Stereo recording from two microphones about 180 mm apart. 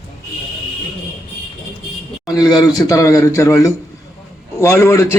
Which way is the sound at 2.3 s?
20° left (ahead or behind).